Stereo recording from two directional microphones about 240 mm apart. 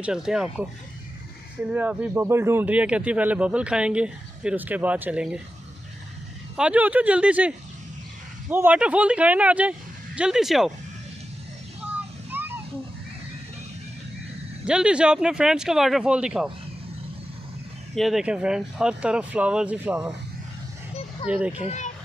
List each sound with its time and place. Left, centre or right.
0.0 s speech: centre
6.5 s speech: centre
11.9 s vehicle: centre
14.7 s speech: centre
17.9 s speech: centre
21.3 s speech: centre
21.6 s a child's voice: left